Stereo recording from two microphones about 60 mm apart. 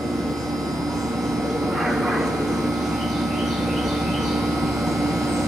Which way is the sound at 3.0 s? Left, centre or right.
Centre.